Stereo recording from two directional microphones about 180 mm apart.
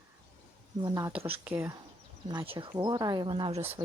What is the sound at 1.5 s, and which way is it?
Speech, 10° right (ahead or behind).